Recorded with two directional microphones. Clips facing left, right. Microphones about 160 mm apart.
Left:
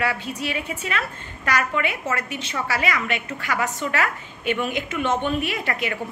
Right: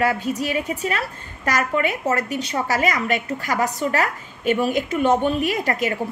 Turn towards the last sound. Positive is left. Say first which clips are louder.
# right 5 dB
turn(degrees=-40)  # may be behind; listen again after turning